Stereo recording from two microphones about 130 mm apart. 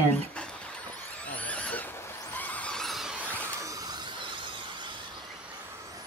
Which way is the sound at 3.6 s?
25° right (ahead or behind).